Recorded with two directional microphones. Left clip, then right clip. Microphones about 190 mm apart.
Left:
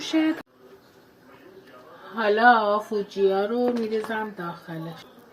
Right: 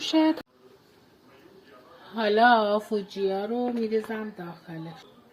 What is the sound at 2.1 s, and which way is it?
Speech, 45° right (ahead or behind).